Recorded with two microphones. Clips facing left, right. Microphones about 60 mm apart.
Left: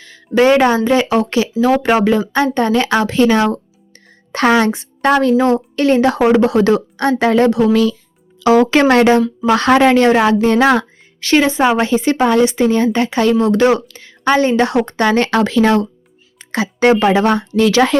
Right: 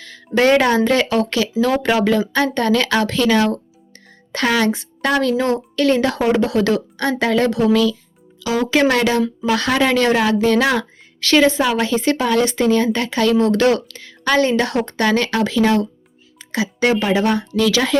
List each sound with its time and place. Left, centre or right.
0.0 s a woman's voice: centre
7.7 s a woman's voice: left
15.3 s a woman's voice: left